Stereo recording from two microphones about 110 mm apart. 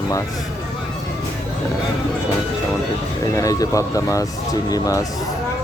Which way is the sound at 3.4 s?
30° left (ahead or behind).